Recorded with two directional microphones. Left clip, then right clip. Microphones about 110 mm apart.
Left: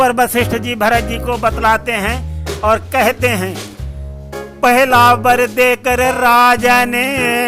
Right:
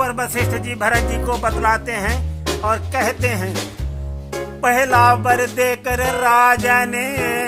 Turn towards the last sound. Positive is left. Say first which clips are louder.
# left 6 dB
turn(degrees=30)  # may be behind; listen again after turning